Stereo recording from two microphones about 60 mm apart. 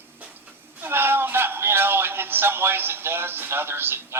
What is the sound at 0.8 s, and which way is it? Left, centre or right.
A man's voice, right.